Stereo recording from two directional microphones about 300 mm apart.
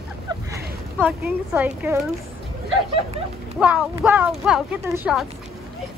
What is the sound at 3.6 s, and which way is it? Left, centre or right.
Speech, centre.